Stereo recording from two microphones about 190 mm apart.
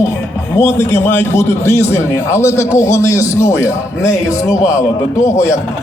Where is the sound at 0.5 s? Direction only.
10° left (ahead or behind).